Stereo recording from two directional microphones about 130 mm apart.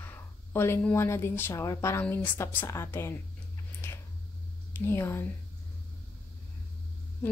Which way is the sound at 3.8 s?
20° left (ahead or behind).